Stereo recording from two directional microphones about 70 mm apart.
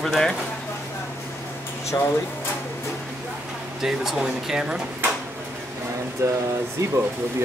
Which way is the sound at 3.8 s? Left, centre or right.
Centre.